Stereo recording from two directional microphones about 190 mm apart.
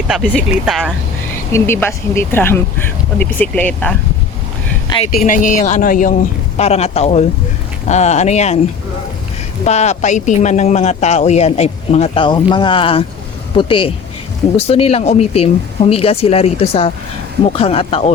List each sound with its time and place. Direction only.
0.1 s speech: centre (ahead or behind)
1.5 s speech: 10° left (ahead or behind)
5.2 s speech: 45° left (ahead or behind)
6.6 s speech: 35° left (ahead or behind)
9.6 s speech: 35° left (ahead or behind)